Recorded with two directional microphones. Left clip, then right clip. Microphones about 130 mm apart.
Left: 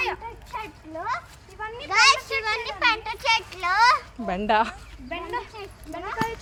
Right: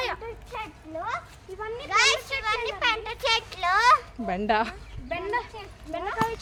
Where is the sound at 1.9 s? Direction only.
20° right (ahead or behind).